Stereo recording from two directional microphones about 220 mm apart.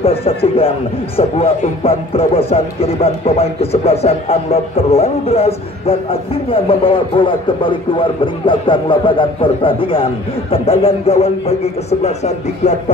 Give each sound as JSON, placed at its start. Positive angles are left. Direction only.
{"t": 0.0, "sound": "speech", "side_deg": 25}